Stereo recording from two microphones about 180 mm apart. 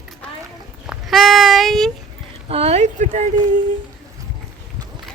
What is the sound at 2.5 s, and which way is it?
Speech, 35° right (ahead or behind).